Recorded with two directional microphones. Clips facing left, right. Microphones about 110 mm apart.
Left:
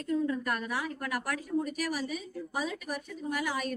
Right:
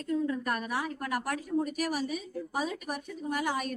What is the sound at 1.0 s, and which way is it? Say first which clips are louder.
A woman's voice: right 2 dB; 35° right (ahead or behind).